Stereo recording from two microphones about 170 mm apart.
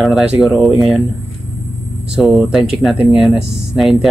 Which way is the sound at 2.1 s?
Centre (ahead or behind).